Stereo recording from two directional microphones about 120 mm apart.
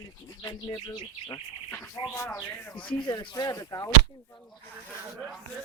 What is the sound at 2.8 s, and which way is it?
Speech, 40° left (ahead or behind).